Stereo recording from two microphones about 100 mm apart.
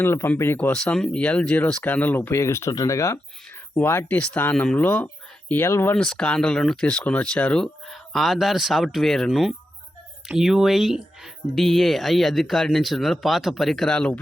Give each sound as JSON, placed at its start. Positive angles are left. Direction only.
{"t": 0.0, "sound": "speech", "side_deg": 25}
{"t": 0.7, "sound": "speech", "side_deg": 5}
{"t": 3.8, "sound": "speech", "side_deg": 20}
{"t": 6.0, "sound": "speech", "side_deg": 10}